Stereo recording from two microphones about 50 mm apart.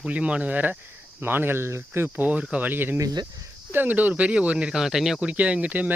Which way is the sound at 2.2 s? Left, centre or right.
Right.